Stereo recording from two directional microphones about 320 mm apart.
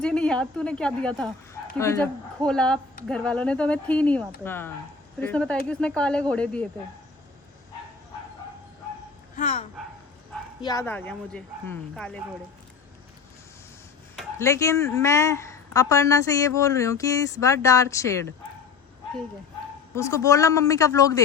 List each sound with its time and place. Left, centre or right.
0.0 s speech: centre
2.4 s speech: centre
9.3 s speech: left
10.6 s speech: centre
14.2 s speech: centre
20.0 s speech: centre